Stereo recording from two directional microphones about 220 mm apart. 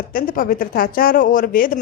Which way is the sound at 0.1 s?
40° left (ahead or behind).